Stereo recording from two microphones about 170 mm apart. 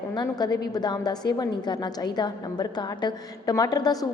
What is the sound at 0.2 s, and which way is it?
A woman's voice, 25° left (ahead or behind).